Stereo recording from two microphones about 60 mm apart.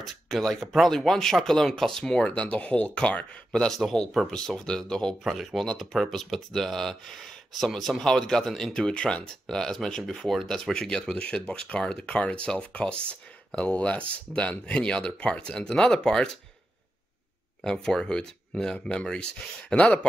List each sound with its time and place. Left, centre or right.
0.0 s speech: centre
2.2 s speech: left
3.5 s speech: centre
5.2 s speech: centre
17.6 s speech: centre